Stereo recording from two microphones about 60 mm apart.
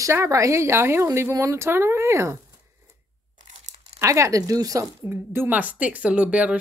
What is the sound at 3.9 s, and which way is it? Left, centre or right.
Speech, right.